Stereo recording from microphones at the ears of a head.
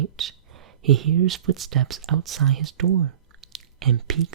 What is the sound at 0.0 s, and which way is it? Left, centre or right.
Speech, right.